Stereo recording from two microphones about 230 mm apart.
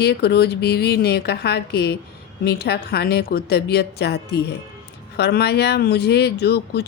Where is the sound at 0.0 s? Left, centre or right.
Left.